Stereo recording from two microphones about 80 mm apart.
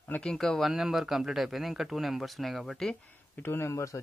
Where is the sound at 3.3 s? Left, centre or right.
Left.